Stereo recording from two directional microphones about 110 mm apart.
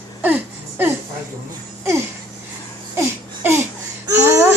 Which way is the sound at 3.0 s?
20° right (ahead or behind).